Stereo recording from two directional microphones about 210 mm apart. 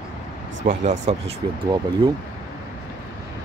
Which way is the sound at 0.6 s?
35° right (ahead or behind).